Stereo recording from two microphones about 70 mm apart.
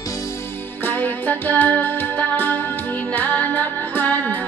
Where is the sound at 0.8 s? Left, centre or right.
Left.